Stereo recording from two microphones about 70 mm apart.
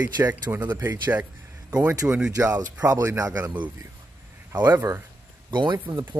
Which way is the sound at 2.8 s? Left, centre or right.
Right.